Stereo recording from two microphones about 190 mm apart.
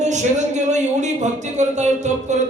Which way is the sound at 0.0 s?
40° right (ahead or behind).